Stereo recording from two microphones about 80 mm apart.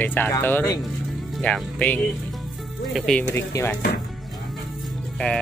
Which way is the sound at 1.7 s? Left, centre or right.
Centre.